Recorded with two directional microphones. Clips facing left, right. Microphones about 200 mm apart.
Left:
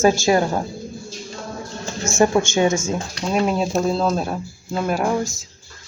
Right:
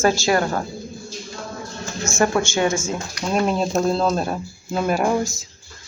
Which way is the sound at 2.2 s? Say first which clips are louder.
Left 3 dB; 20° left (ahead or behind).